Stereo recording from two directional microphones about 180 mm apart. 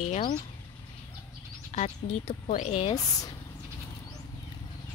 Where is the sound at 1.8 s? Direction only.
40° left (ahead or behind).